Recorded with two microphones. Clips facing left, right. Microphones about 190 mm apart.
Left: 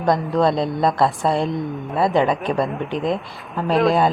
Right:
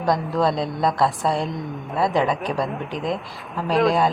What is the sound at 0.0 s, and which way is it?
A woman's voice, centre (ahead or behind).